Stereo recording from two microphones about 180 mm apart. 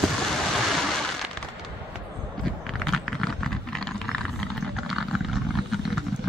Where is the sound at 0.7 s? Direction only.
Centre (ahead or behind).